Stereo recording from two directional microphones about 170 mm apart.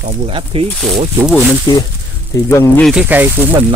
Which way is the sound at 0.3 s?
30° right (ahead or behind).